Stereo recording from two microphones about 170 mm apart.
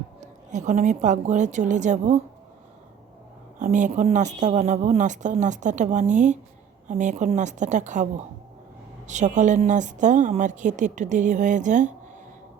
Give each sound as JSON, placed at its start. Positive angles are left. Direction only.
{"t": 0.2, "sound": "a woman's voice", "side_deg": -45}
{"t": 3.6, "sound": "a woman's voice", "side_deg": -45}
{"t": 9.0, "sound": "a woman's voice", "side_deg": -45}